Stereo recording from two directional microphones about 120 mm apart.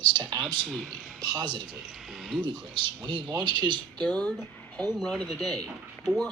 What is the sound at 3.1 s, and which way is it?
Speech, 40° right (ahead or behind).